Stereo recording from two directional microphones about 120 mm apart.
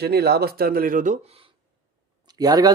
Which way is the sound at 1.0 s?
90° right.